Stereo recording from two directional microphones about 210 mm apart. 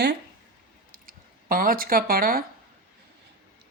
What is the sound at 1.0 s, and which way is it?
Speech, 45° right (ahead or behind).